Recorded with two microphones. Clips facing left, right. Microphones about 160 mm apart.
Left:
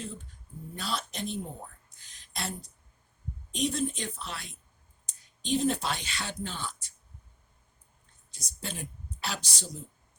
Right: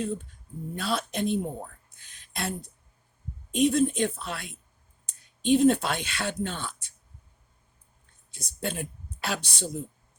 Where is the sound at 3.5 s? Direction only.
55° right (ahead or behind).